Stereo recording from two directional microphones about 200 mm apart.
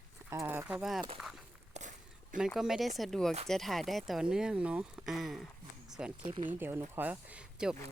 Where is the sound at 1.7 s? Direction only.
35° right (ahead or behind).